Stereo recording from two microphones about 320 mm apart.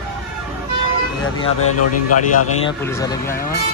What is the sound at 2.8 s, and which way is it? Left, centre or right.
Speech, centre.